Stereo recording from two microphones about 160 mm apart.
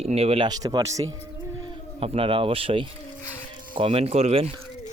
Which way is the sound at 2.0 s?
35° right (ahead or behind).